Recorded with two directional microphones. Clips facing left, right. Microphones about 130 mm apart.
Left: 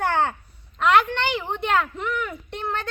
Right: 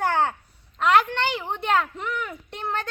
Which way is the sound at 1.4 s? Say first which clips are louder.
Left 2 dB; 10° right (ahead or behind).